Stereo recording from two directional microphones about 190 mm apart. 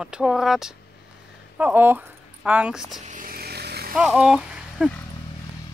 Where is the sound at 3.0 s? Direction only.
40° right (ahead or behind).